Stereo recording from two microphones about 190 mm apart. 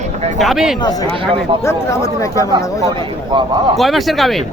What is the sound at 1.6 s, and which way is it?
Speech, 15° left (ahead or behind).